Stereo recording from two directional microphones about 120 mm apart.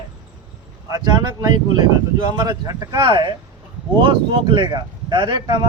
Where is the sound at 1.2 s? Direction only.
35° right (ahead or behind).